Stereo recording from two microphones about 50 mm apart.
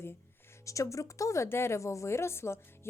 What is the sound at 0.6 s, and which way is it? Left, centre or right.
Speech, left.